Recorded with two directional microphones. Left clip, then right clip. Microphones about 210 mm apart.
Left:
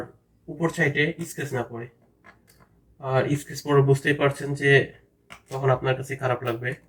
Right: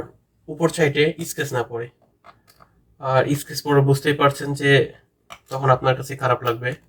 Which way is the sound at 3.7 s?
40° right (ahead or behind).